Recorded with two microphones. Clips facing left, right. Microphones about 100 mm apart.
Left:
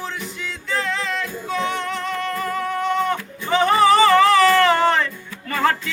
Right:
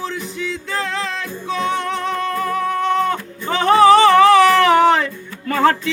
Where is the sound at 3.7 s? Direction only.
90° right; by 5.5 s 75° right (ahead or behind).